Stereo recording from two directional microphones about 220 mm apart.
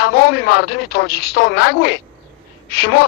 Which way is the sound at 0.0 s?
45° left (ahead or behind).